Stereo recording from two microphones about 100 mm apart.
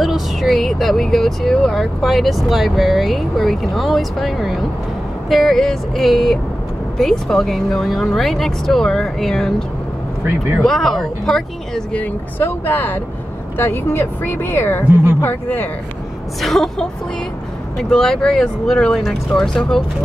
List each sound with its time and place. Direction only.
0.0 s speech: centre (ahead or behind)
10.6 s speech: 5° left (ahead or behind)
12.0 s speech: 20° left (ahead or behind)
16.3 s speech: centre (ahead or behind)